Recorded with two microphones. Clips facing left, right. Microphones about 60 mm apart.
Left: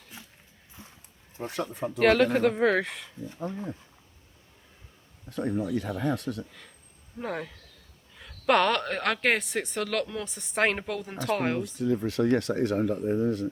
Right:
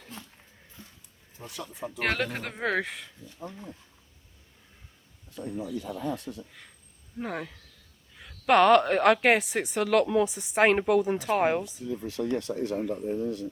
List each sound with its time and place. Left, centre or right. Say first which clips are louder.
0.1 s mechanisms: right 3 dB; centre
1.5 s speech: left 8 dB; left
2.0 s speech: left 9 dB; centre
5.3 s speech: left 6 dB; left
7.2 s a woman's voice: left 1 dB; centre
11.6 s speech: left 7 dB; left